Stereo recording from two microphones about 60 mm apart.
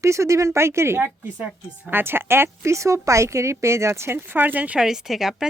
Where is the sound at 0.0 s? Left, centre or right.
Right.